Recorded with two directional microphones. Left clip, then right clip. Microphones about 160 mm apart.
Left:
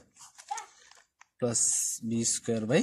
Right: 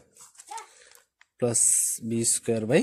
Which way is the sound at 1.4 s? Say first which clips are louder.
Right 4 dB; 35° right (ahead or behind).